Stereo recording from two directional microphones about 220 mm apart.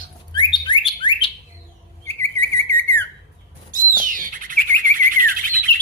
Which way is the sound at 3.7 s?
35° right (ahead or behind).